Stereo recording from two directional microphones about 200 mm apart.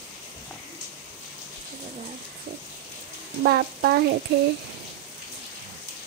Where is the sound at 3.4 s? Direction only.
50° right (ahead or behind).